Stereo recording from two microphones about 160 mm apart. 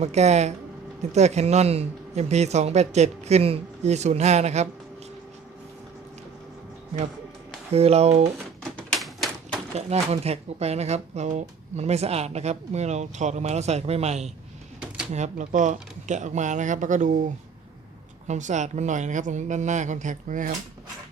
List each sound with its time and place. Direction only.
0.0 s speech: 45° right (ahead or behind)
7.7 s speech: 40° right (ahead or behind)
8.9 s typewriter: centre (ahead or behind)
9.7 s speech: 40° right (ahead or behind)